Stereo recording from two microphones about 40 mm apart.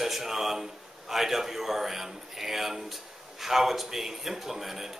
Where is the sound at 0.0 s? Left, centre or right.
Centre.